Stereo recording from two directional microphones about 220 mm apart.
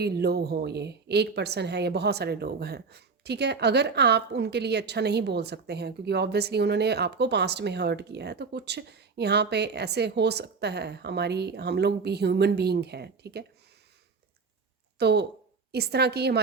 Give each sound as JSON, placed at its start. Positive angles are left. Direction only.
{"t": 0.0, "sound": "a woman's voice", "side_deg": -45}
{"t": 14.9, "sound": "a woman's voice", "side_deg": -50}